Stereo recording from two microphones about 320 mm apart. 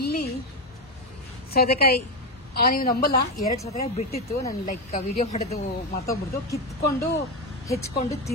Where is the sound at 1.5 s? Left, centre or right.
Left.